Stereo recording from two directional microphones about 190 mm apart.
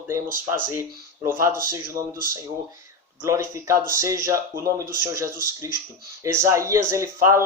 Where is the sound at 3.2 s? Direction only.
15° right (ahead or behind).